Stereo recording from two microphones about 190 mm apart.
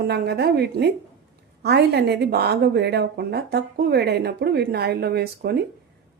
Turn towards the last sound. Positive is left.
turn(degrees=-55)  # may be behind; listen again after turning